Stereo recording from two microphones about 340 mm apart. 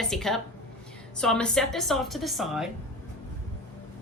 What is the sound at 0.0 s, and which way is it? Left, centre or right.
A woman's voice, centre.